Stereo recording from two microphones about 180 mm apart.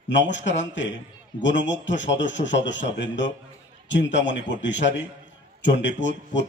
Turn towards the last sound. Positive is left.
turn(degrees=80)